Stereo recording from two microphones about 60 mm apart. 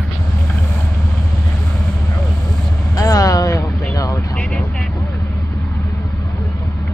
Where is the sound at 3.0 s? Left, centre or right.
Left.